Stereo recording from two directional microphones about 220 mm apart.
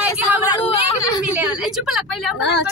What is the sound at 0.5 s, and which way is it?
Speech, 25° left (ahead or behind).